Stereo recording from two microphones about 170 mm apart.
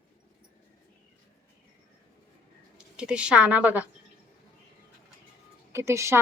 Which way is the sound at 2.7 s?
5° right (ahead or behind).